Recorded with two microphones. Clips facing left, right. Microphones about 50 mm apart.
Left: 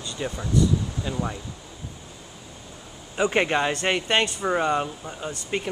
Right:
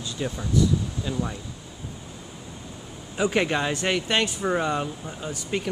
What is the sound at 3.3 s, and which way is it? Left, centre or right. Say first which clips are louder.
Speech: left 2 dB; centre.